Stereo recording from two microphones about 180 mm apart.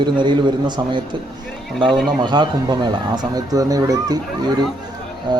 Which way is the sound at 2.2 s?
25° right (ahead or behind).